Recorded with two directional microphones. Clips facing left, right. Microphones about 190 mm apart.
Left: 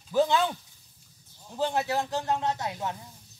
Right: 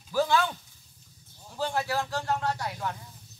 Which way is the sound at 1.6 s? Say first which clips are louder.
Left 2 dB; 20° left (ahead or behind).